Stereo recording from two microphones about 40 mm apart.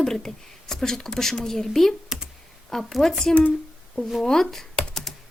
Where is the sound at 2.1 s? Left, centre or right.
Centre.